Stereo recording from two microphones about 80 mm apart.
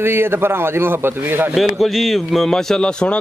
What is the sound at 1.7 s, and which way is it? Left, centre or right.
A man's voice, centre.